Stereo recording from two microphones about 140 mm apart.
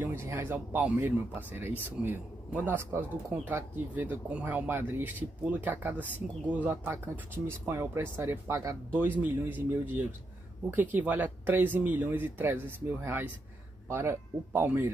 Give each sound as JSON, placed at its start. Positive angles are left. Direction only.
{"t": 0.0, "sound": "speech", "side_deg": -20}